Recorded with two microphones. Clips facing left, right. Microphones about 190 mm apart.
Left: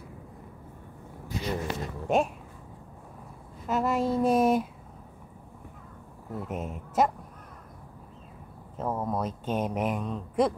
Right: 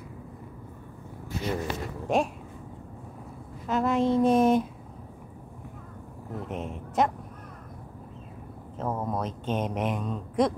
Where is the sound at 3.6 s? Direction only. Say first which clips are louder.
Right 2 dB; 5° left (ahead or behind).